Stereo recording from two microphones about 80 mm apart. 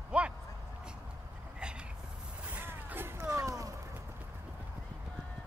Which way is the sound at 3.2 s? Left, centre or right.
Right.